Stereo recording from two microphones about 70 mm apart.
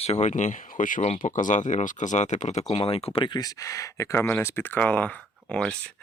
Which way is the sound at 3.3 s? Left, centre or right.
Left.